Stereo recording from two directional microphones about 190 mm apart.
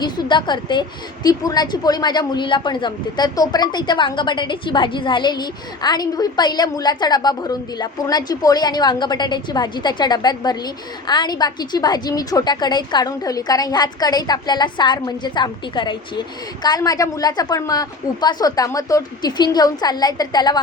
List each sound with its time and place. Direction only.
0.0 s a woman's voice: 25° left (ahead or behind)